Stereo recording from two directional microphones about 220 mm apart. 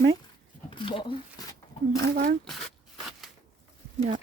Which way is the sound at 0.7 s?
20° left (ahead or behind).